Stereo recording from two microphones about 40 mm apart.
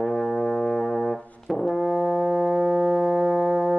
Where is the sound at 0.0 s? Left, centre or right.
Centre.